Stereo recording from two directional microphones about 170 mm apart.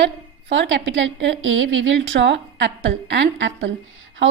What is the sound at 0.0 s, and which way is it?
A woman's voice, 90° right.